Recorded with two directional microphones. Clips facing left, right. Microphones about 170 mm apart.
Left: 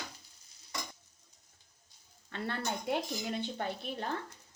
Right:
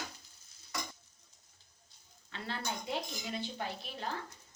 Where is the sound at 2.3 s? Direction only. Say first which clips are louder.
Left 4 dB; 55° left (ahead or behind).